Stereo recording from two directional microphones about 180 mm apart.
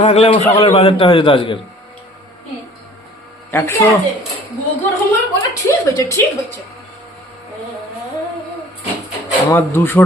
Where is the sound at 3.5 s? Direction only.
15° left (ahead or behind).